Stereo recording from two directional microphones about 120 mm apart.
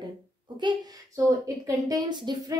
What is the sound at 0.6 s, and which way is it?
A woman's voice, 40° right (ahead or behind).